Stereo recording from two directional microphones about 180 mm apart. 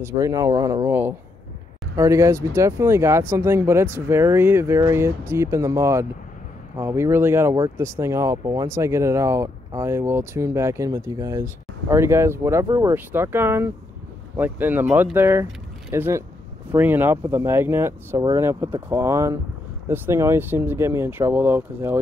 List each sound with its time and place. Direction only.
0.0 s speech: 15° right (ahead or behind)